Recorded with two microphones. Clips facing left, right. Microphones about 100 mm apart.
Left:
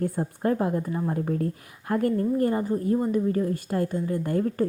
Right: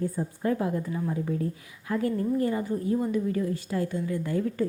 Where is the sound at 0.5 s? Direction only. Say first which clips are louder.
Left 3 dB; 40° left (ahead or behind).